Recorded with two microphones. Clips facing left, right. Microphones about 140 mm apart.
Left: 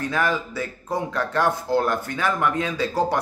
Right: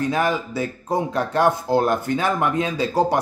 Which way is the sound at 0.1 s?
15° right (ahead or behind).